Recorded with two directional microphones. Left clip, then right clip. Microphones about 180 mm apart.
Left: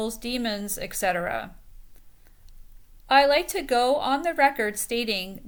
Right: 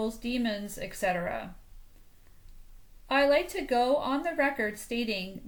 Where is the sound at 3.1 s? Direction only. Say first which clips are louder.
Left 6 dB; 20° left (ahead or behind).